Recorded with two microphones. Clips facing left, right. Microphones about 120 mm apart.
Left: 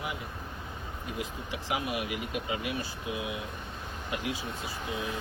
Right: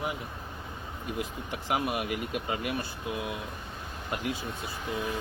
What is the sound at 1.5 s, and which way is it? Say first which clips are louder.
Speech: right 3 dB; 50° right (ahead or behind).